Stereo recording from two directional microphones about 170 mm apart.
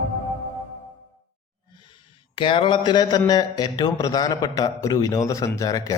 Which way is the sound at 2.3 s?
30° left (ahead or behind).